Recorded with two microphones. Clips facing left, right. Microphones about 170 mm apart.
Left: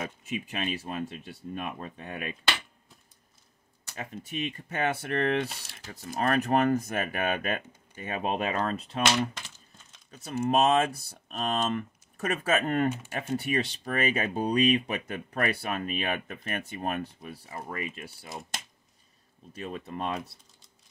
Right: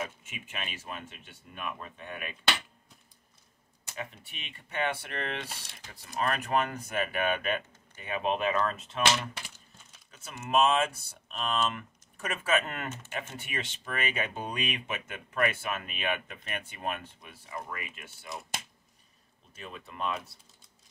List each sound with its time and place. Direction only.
0.2 s speech: 35° left (ahead or behind)
3.9 s speech: 40° left (ahead or behind)
10.1 s speech: 35° left (ahead or behind)
18.3 s speech: centre (ahead or behind)
19.5 s speech: 35° left (ahead or behind)